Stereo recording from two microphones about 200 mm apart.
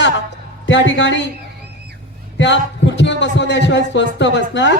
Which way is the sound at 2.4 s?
65° left (ahead or behind).